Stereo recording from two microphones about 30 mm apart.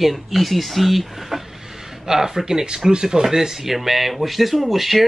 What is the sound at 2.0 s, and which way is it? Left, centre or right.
Speech, centre.